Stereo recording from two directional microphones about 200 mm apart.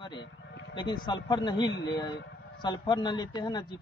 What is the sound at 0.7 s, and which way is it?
Speech, 25° left (ahead or behind).